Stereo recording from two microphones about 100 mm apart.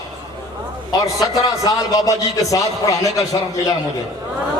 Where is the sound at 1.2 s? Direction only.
35° left (ahead or behind).